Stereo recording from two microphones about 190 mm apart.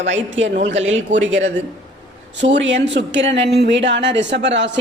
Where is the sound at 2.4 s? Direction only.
70° right (ahead or behind).